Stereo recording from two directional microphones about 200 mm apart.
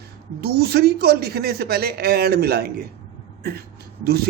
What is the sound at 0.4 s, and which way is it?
Speech, 50° right (ahead or behind).